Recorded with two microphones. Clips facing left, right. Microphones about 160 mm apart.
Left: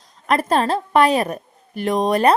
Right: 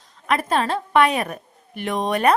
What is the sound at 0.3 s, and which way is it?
A woman's voice, 40° left (ahead or behind).